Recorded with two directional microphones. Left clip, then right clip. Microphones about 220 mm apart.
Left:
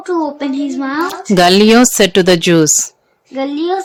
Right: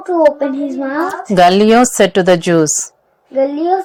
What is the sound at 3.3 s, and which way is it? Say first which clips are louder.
Child singing: right 4 dB; 35° left (ahead or behind).